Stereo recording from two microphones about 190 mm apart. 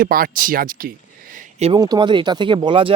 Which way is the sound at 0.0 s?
50° right (ahead or behind).